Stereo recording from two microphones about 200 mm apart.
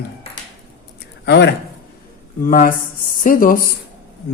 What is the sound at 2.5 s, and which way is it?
Speech, 40° left (ahead or behind).